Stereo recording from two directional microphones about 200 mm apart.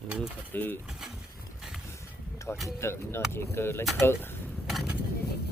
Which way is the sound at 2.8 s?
10° left (ahead or behind).